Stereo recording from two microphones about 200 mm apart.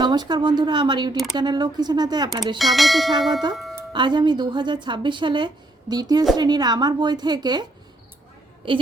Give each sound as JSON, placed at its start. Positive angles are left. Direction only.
{"t": 0.0, "sound": "speech", "side_deg": -20}
{"t": 2.6, "sound": "bell", "side_deg": 0}
{"t": 3.5, "sound": "speech", "side_deg": 0}
{"t": 3.9, "sound": "speech", "side_deg": -20}